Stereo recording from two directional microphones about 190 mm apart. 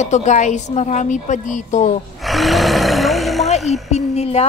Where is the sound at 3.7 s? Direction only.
35° left (ahead or behind).